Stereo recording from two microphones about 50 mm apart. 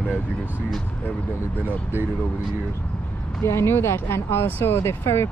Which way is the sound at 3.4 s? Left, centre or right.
Left.